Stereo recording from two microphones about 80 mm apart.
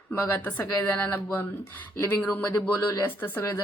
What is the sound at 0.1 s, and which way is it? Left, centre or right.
Speech, left.